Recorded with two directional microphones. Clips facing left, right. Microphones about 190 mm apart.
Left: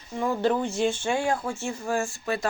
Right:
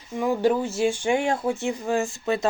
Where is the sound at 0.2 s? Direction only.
10° right (ahead or behind).